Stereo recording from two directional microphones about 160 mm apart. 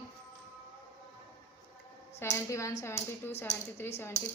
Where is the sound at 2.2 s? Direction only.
20° left (ahead or behind).